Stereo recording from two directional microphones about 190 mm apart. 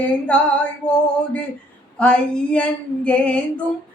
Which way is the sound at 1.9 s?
5° left (ahead or behind).